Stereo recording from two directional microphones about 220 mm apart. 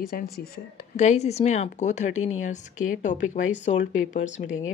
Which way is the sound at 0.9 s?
30° left (ahead or behind).